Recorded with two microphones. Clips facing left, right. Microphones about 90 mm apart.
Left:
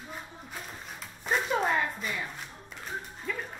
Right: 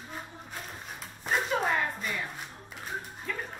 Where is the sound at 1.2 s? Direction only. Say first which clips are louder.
Left 1 dB; centre (ahead or behind).